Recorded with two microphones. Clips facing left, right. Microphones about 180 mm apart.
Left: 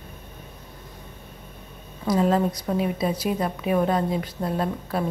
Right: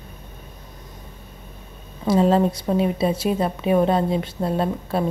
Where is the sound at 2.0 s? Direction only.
30° right (ahead or behind).